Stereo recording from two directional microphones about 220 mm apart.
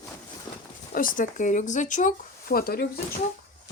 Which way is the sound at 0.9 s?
40° left (ahead or behind).